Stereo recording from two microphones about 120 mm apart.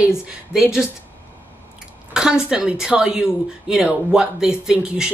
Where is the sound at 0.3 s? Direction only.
5° right (ahead or behind).